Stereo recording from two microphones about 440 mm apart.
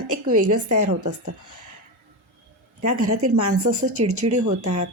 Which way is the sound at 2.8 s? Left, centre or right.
Right.